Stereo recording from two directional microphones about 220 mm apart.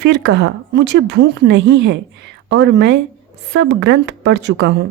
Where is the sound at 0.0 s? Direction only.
50° right (ahead or behind).